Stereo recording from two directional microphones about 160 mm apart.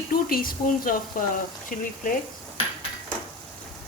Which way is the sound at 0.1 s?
65° left (ahead or behind).